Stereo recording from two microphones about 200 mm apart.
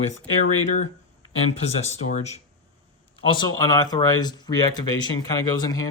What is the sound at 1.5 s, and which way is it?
Speech, 35° left (ahead or behind).